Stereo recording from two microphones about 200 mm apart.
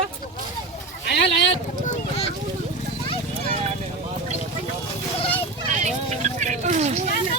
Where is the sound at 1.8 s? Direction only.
30° left (ahead or behind).